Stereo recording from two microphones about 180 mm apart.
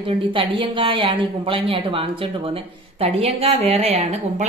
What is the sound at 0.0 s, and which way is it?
Speech, 30° right (ahead or behind).